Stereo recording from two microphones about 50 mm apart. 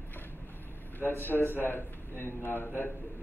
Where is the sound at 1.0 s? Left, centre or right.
Left.